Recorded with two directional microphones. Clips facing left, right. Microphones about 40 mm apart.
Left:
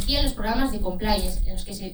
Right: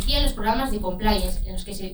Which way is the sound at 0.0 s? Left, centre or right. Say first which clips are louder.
Right 2 dB; right.